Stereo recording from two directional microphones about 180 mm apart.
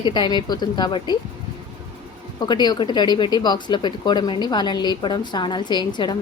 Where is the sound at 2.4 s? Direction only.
25° left (ahead or behind).